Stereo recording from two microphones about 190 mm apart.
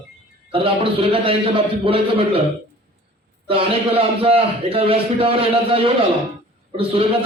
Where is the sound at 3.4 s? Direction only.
30° right (ahead or behind).